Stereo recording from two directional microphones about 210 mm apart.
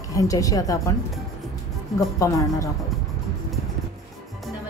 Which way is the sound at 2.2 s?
15° left (ahead or behind).